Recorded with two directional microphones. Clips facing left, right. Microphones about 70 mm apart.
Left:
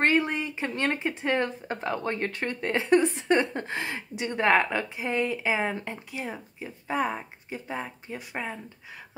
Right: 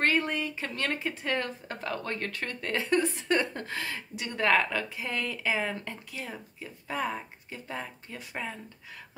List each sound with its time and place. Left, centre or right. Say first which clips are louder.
0.0 s speech: left 3 dB; left